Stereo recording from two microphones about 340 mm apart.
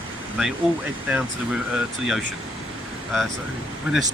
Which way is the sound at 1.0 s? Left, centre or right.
Centre.